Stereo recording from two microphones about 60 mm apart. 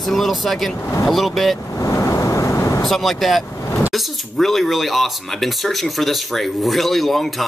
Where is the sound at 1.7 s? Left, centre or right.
Left.